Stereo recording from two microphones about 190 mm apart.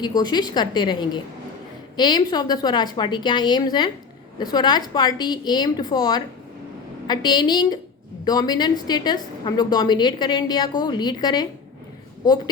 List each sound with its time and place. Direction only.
0.0 s a woman's voice: 20° left (ahead or behind)